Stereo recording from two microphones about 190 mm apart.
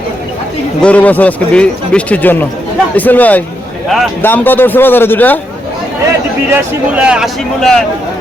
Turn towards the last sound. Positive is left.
turn(degrees=0)  # may be behind; listen again after turning